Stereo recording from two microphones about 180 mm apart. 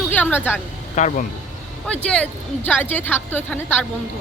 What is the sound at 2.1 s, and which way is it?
A woman's voice, 5° left (ahead or behind).